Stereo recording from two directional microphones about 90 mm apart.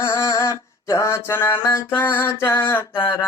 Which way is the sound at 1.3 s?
25° left (ahead or behind).